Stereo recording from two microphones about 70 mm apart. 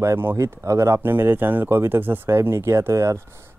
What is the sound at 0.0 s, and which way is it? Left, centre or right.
Speech, right.